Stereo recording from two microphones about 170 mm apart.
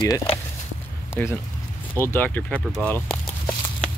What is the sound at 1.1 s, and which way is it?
Speech, 15° left (ahead or behind).